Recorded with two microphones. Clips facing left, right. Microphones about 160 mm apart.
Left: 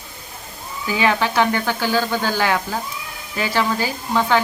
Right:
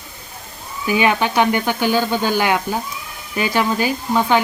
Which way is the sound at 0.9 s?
20° right (ahead or behind).